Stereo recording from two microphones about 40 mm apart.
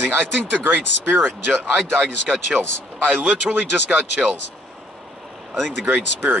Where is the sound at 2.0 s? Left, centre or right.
Right.